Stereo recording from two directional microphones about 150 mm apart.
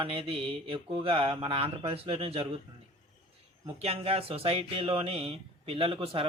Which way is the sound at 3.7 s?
40° right (ahead or behind).